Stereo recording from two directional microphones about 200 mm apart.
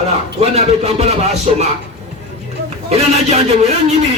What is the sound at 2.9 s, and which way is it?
A man's voice, 30° right (ahead or behind).